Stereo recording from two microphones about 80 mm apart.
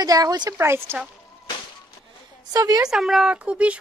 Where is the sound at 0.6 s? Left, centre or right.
Right.